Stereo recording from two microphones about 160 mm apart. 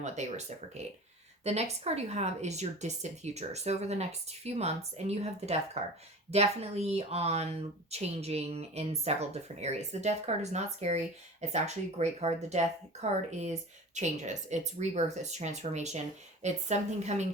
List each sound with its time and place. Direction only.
0.0 s speech: 45° right (ahead or behind)
1.5 s speech: 40° right (ahead or behind)